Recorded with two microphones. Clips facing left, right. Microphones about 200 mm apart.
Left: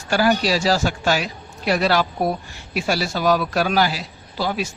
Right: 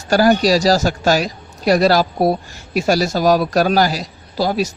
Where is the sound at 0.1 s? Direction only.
40° right (ahead or behind).